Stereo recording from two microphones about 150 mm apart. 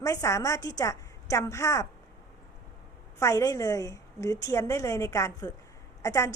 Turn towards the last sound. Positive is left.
turn(degrees=20)  # may be behind; listen again after turning